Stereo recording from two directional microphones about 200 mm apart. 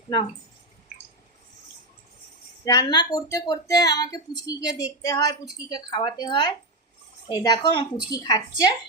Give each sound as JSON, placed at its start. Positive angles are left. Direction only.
{"t": 2.6, "sound": "a woman's voice", "side_deg": 20}